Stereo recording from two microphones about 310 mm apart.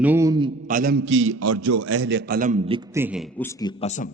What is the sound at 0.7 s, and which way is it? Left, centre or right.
A man's voice, right.